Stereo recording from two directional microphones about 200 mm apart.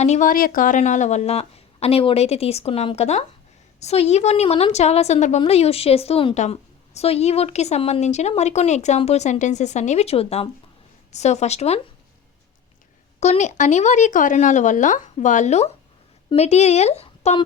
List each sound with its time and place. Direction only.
0.0 s a woman's voice: 35° left (ahead or behind)
13.1 s a woman's voice: 35° left (ahead or behind)